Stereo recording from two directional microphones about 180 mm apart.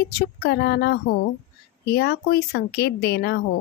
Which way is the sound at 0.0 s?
65° left (ahead or behind).